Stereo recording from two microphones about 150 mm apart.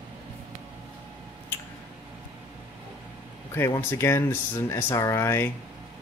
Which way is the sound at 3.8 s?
15° left (ahead or behind).